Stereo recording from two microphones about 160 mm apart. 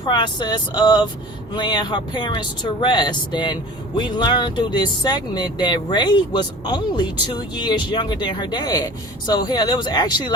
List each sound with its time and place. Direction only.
0.0 s speech: 30° left (ahead or behind)